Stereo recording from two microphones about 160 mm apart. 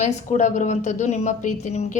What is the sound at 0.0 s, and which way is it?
A woman's voice, 50° left (ahead or behind).